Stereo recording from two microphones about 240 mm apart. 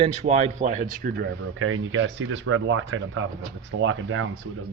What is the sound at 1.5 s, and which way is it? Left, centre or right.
Speech, right.